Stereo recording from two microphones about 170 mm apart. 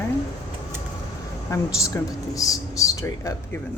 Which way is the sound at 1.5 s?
20° left (ahead or behind).